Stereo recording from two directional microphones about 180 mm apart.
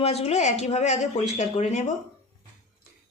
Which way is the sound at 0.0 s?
35° left (ahead or behind).